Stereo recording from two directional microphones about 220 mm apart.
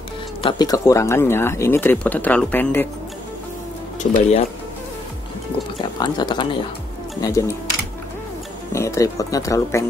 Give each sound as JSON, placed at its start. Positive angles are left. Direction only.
{"t": 0.4, "sound": "speech", "side_deg": 20}
{"t": 4.0, "sound": "speech", "side_deg": 30}
{"t": 5.8, "sound": "speech", "side_deg": 20}
{"t": 8.7, "sound": "speech", "side_deg": 15}